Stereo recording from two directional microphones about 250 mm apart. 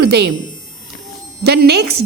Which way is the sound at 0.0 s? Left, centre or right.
Right.